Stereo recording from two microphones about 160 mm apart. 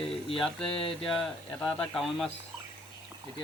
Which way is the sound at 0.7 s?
35° left (ahead or behind).